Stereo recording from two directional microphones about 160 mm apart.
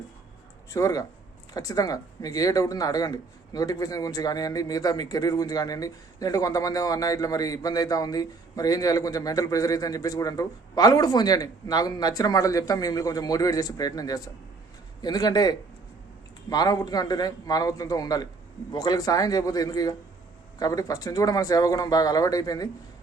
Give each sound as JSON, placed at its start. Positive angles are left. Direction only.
{"t": 0.7, "sound": "speech", "side_deg": 20}